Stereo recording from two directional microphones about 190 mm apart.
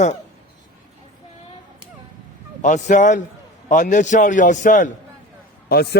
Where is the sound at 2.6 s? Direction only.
40° left (ahead or behind).